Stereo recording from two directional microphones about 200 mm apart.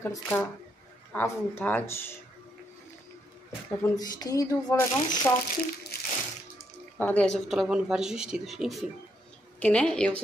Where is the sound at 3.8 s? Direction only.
20° left (ahead or behind).